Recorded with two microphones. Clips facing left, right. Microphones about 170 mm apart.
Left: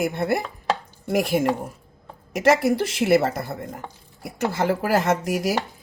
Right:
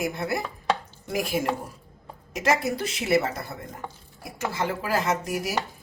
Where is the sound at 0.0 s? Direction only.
60° left (ahead or behind).